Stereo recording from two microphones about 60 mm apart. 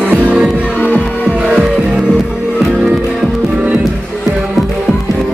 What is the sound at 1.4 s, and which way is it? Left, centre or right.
Music, centre.